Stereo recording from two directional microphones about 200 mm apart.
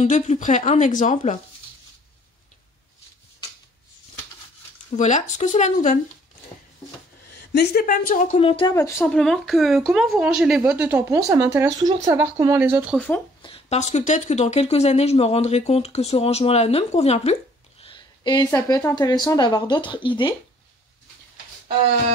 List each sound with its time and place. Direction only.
0.0 s speech: 35° left (ahead or behind)
4.9 s speech: 35° left (ahead or behind)
7.5 s speech: 45° left (ahead or behind)
8.4 s speech: 30° left (ahead or behind)
8.7 s a woman's voice: 15° left (ahead or behind)
9.1 s a woman's voice: centre (ahead or behind)
12.9 s a woman's voice: 5° left (ahead or behind)
13.4 s speech: 30° left (ahead or behind)